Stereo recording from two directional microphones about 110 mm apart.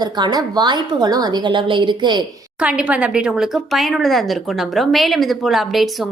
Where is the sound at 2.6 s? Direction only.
10° right (ahead or behind).